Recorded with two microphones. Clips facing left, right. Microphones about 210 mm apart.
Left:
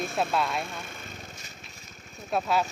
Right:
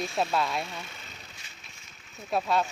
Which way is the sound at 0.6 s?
50° left (ahead or behind).